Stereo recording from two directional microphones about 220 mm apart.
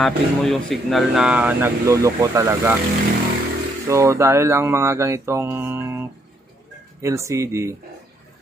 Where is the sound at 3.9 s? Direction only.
15° right (ahead or behind).